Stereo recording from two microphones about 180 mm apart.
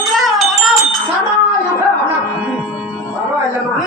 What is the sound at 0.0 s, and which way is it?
Wind chime, centre (ahead or behind).